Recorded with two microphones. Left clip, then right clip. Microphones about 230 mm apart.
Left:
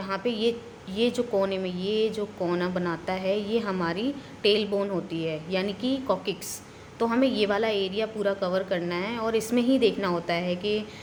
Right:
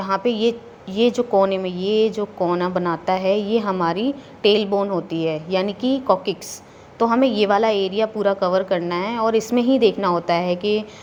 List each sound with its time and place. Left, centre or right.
0.0 s a woman's voice: centre